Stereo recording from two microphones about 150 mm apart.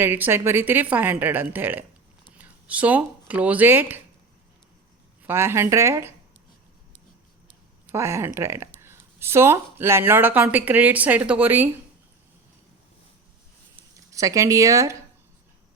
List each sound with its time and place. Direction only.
0.0 s speech: 15° right (ahead or behind)
5.2 s speech: 15° right (ahead or behind)
7.9 s speech: 20° right (ahead or behind)
14.1 s speech: 20° right (ahead or behind)